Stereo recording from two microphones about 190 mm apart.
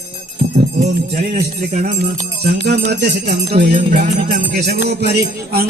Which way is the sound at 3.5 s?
50° right (ahead or behind).